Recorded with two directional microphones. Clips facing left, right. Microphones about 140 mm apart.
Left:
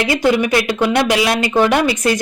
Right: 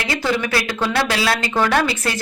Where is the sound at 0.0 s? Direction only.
20° left (ahead or behind).